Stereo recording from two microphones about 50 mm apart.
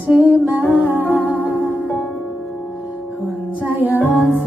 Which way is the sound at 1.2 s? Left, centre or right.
Left.